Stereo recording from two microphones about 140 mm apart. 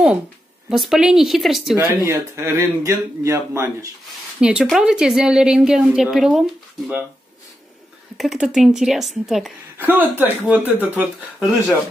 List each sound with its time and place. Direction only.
0.7 s a woman's voice: centre (ahead or behind)
1.8 s speech: 20° right (ahead or behind)
4.4 s a woman's voice: 5° right (ahead or behind)
8.2 s a woman's voice: 5° right (ahead or behind)
9.8 s speech: 15° right (ahead or behind)
11.3 s a woman's voice: centre (ahead or behind)